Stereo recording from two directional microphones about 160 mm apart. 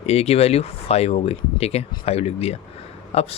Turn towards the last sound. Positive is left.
turn(degrees=40)  # may be behind; listen again after turning